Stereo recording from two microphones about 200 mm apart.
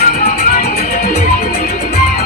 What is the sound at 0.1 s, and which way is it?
Music, 35° left (ahead or behind).